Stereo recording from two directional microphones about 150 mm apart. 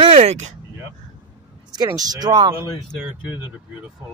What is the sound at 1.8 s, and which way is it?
Speech, 25° right (ahead or behind).